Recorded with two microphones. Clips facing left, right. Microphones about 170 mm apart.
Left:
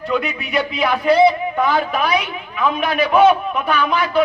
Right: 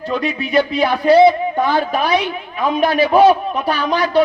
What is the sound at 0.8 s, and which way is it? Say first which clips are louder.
A man's voice: right 2 dB; 30° right (ahead or behind).